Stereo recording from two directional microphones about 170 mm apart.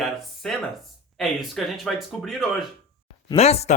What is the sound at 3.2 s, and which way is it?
Speech, 35° left (ahead or behind).